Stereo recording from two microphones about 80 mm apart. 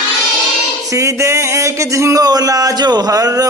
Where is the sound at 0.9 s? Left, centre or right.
Right.